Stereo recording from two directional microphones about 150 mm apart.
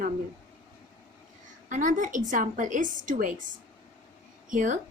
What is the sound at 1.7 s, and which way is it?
A woman's voice, 60° right (ahead or behind).